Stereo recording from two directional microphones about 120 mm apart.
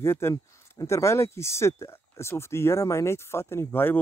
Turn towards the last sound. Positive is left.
turn(degrees=15)  # may be behind; listen again after turning